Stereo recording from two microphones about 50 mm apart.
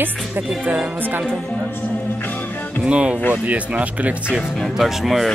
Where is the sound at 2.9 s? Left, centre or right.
Right.